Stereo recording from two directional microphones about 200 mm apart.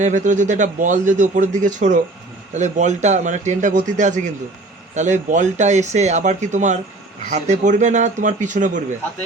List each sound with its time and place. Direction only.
0.0 s a man's voice: 35° right (ahead or behind)